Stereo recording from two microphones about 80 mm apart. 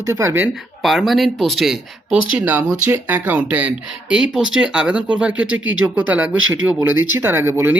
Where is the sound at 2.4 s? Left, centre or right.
Right.